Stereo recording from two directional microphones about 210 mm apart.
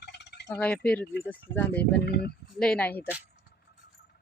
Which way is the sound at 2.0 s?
50° left (ahead or behind).